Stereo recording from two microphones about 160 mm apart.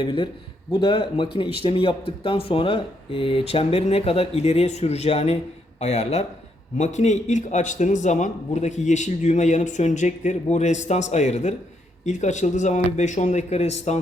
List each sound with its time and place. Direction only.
0.0 s speech: 30° left (ahead or behind)